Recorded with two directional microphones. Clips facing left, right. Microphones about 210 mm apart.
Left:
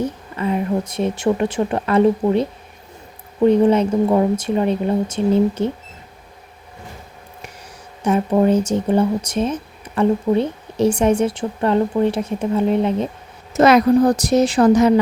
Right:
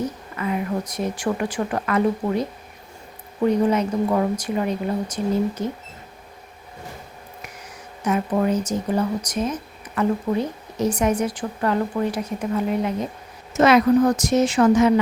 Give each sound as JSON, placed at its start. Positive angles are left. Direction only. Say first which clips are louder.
{"t": 0.0, "sound": "speech", "louder": "left 4 dB", "side_deg": 30}
{"t": 8.0, "sound": "speech", "louder": "left 5 dB", "side_deg": 25}
{"t": 13.5, "sound": "a woman's voice", "louder": "left 3 dB", "side_deg": 40}